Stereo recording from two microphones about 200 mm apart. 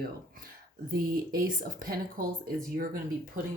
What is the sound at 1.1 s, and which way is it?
Speech, 45° right (ahead or behind).